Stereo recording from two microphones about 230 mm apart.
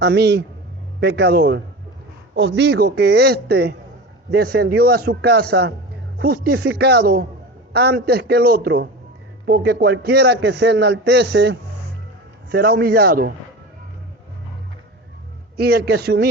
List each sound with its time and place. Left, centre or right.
0.0 s a man's voice: right
15.5 s a man's voice: right